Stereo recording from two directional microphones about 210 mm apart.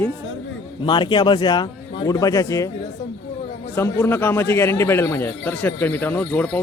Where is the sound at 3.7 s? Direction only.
10° left (ahead or behind).